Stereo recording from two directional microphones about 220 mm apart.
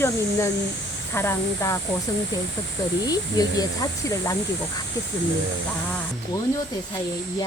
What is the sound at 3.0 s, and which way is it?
Speech, 15° left (ahead or behind).